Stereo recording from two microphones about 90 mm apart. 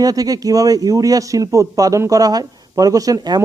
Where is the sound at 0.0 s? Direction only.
45° right (ahead or behind).